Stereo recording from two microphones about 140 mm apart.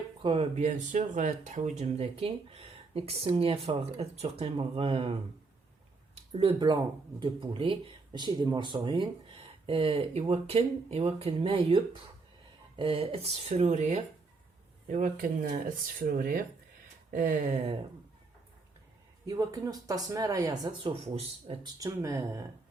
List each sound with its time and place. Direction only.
0.2 s speech: 40° right (ahead or behind)
6.1 s a sound: 40° right (ahead or behind)
7.2 s speech: 35° right (ahead or behind); by 16.5 s 90° right
17.1 s a sound: 65° right (ahead or behind)
19.2 s speech: 25° right (ahead or behind)
20.7 s speech: 35° right (ahead or behind)
21.8 s speech: 25° right (ahead or behind)